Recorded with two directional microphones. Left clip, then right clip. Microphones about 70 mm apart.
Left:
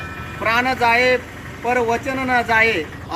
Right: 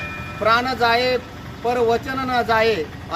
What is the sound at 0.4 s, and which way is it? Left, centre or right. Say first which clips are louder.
Speech: even; right.